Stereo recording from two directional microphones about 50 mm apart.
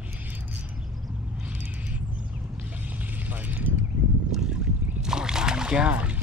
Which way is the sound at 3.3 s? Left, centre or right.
Right.